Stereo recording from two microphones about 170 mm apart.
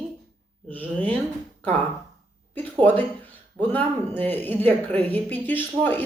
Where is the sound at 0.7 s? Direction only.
10° left (ahead or behind).